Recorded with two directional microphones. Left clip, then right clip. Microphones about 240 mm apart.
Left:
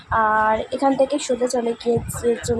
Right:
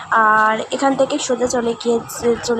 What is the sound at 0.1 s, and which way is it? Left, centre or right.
A woman's voice, centre.